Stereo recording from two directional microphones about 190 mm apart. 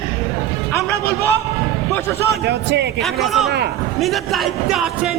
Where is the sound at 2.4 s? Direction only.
60° right (ahead or behind).